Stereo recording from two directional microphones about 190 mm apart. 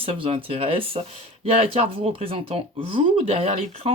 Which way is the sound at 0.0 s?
30° right (ahead or behind).